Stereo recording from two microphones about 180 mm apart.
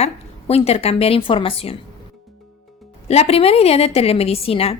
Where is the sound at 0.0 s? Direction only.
35° left (ahead or behind).